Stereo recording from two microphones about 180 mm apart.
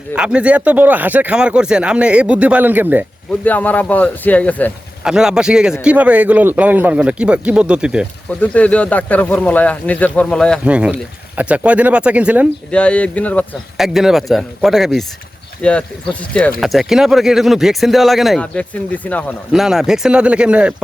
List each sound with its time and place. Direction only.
0.2 s a man's voice: 5° right (ahead or behind)
3.4 s speech: 10° left (ahead or behind)
5.0 s a man's voice: 5° right (ahead or behind)
8.4 s speech: 10° left (ahead or behind)
10.6 s a man's voice: 5° right (ahead or behind)
12.7 s speech: 5° left (ahead or behind)
19.6 s speech: 5° right (ahead or behind)